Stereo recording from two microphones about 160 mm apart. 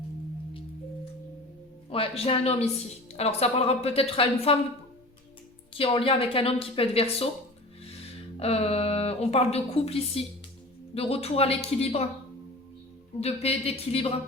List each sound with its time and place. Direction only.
1.9 s a woman's voice: 35° left (ahead or behind)
5.7 s a woman's voice: 35° left (ahead or behind)
8.4 s a woman's voice: 40° left (ahead or behind)
13.1 s a woman's voice: 40° left (ahead or behind)